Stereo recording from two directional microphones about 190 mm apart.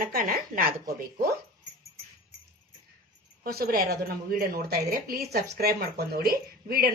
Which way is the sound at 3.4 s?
55° right (ahead or behind).